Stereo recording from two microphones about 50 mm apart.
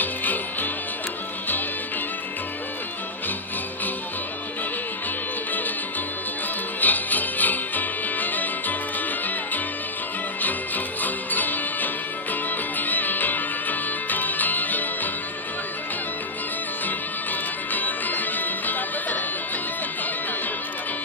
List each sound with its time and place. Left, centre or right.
0.0 s music: left
6.8 s music: left
10.4 s music: left
16.8 s music: left